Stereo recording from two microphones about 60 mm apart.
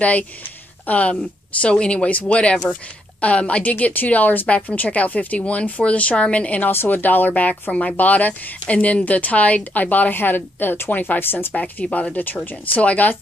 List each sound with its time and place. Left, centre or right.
0.0 s speech: left
6.7 s speech: left
11.5 s speech: left